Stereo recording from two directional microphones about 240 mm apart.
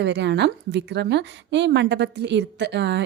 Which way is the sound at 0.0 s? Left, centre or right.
Right.